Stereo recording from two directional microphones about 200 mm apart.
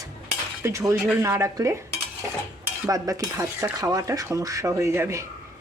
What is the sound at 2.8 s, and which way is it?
Speech, 15° right (ahead or behind).